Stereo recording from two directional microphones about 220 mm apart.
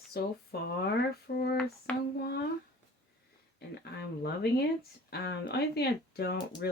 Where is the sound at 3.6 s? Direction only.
45° left (ahead or behind).